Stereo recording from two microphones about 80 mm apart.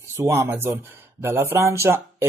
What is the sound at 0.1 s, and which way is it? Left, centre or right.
Speech, right.